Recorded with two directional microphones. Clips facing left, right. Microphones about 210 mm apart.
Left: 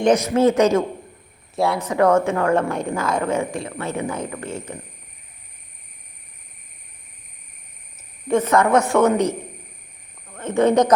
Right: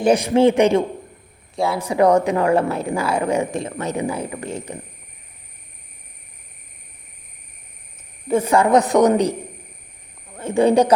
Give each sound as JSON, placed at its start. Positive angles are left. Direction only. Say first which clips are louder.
{"t": 0.3, "sound": "a woman's voice", "louder": "right 4 dB", "side_deg": -15}
{"t": 1.5, "sound": "speech", "louder": "left 1 dB", "side_deg": 0}
{"t": 1.8, "sound": "a woman's voice", "louder": "right 2 dB", "side_deg": -15}
{"t": 3.9, "sound": "a woman's voice", "louder": "right 2 dB", "side_deg": -10}
{"t": 8.3, "sound": "a woman's voice", "louder": "right 1 dB", "side_deg": -10}
{"t": 8.7, "sound": "a man's voice", "louder": "right 4 dB", "side_deg": -35}
{"t": 10.3, "sound": "speech", "louder": "right 1 dB", "side_deg": -10}